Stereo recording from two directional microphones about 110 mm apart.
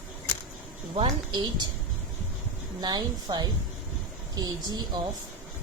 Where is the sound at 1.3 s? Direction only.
40° right (ahead or behind).